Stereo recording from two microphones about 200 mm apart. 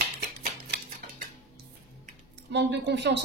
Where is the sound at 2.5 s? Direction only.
60° right (ahead or behind).